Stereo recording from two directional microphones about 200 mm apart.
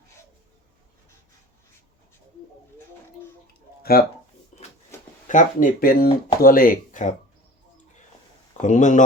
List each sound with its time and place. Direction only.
4.0 s speech: 50° left (ahead or behind)
4.5 s a sound: 35° left (ahead or behind)
5.3 s speech: 40° left (ahead or behind)
8.6 s speech: 40° left (ahead or behind)